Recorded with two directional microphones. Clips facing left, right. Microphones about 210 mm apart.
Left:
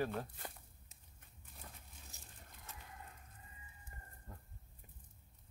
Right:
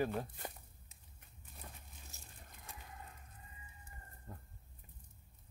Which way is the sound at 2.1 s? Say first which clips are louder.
Right 1 dB; 15° left (ahead or behind).